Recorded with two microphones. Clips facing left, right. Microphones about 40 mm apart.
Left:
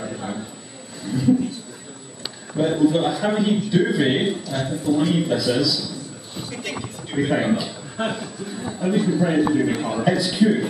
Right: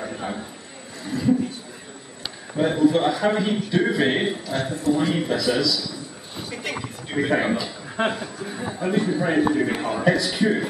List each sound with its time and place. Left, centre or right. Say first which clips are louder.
0.0 s a sound: even; centre
2.5 s speech: left 1 dB; centre
6.3 s a sound: even; centre
8.0 s a man's voice: right 2 dB; centre
8.9 s a man's voice: left 2 dB; centre
10.0 s speech: right 1 dB; centre
10.4 s a man's voice: left 5 dB; centre